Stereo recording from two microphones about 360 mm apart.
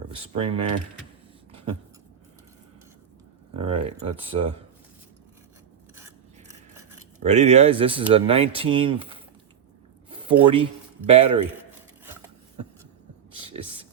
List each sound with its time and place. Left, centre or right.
0.1 s speech: centre
3.5 s speech: centre
7.2 s speech: centre
10.2 s a sound: centre
10.5 s a man's voice: centre